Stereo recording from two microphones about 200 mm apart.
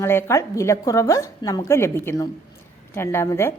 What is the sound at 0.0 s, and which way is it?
A woman's voice, 15° left (ahead or behind).